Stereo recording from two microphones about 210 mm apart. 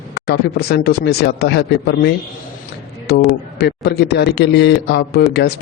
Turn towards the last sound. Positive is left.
turn(degrees=50)  # may be behind; listen again after turning